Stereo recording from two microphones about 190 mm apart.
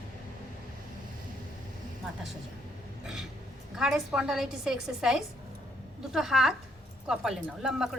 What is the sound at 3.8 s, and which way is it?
A woman's voice, 5° right (ahead or behind).